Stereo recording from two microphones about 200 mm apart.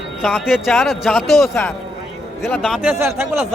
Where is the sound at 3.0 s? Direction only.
10° right (ahead or behind).